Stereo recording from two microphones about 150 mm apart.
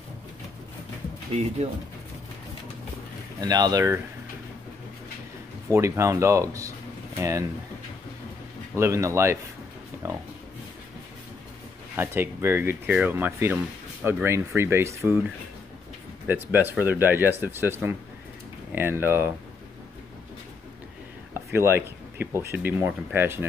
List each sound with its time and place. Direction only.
3.3 s speech: 25° right (ahead or behind)
5.7 s speech: 20° right (ahead or behind)
8.7 s speech: 20° right (ahead or behind)
10.0 s a sound: 20° right (ahead or behind)
12.0 s speech: 15° right (ahead or behind)
16.3 s speech: 15° right (ahead or behind)
21.3 s speech: 15° right (ahead or behind)